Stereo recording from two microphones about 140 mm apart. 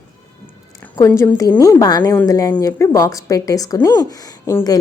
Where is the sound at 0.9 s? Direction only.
20° left (ahead or behind).